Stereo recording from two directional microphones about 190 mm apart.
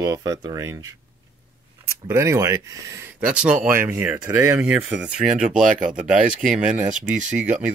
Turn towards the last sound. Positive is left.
turn(degrees=-5)  # may be behind; listen again after turning